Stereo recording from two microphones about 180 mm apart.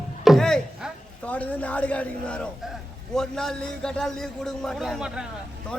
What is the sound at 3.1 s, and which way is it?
A man's voice, 5° left (ahead or behind).